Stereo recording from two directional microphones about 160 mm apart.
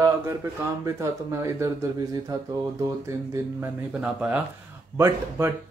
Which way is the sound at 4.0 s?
5° right (ahead or behind).